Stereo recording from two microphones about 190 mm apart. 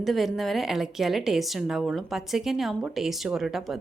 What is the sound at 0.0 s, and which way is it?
A woman's voice, centre (ahead or behind).